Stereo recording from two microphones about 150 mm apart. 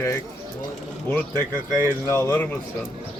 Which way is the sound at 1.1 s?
10° left (ahead or behind).